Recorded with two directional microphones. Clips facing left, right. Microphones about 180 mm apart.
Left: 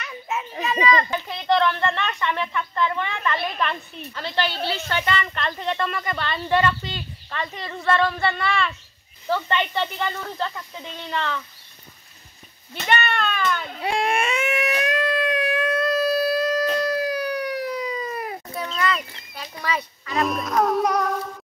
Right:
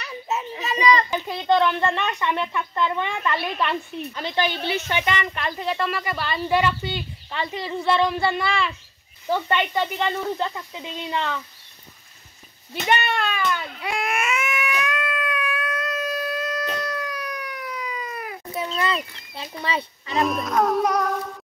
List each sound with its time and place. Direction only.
0.0 s children playing: 30° right (ahead or behind)
1.2 s speech: 15° right (ahead or behind)
12.7 s speech: 15° right (ahead or behind)
13.7 s a sound: 30° left (ahead or behind)
19.3 s speech: 25° right (ahead or behind)
20.1 s speech: centre (ahead or behind)